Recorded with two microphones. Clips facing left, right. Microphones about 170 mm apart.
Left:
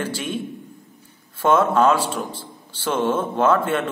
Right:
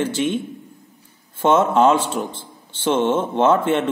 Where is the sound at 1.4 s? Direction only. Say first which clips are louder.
Right 2 dB; 25° right (ahead or behind).